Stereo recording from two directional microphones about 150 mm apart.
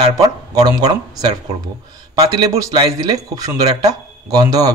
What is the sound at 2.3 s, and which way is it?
Speech, 20° right (ahead or behind).